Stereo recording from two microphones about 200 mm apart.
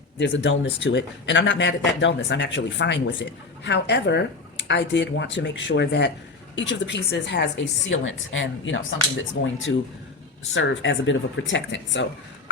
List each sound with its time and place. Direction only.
0.2 s speech: 60° left (ahead or behind)